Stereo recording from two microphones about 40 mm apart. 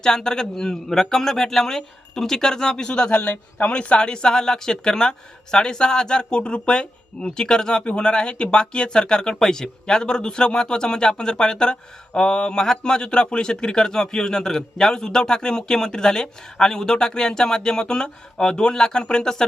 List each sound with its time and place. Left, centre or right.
0.0 s a man's voice: centre
3.2 s a man's voice: left; by 19.5 s centre